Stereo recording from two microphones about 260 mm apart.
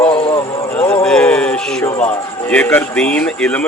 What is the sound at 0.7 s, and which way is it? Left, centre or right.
Music, centre.